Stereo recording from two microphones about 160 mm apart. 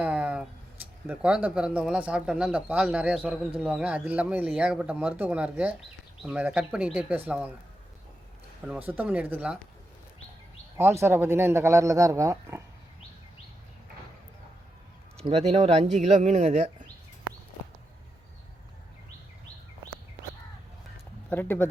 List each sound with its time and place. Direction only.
0.0 s a sound: 10° right (ahead or behind)
1.0 s speech: 10° right (ahead or behind)
8.9 s speech: 10° right (ahead or behind)
10.8 s speech: 15° right (ahead or behind)
15.2 s speech: 40° right (ahead or behind)
21.2 s speech: 10° left (ahead or behind)